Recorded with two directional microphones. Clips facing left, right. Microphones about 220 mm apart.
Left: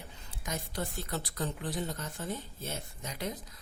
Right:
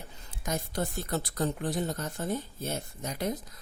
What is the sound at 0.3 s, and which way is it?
A woman's voice, 45° right (ahead or behind).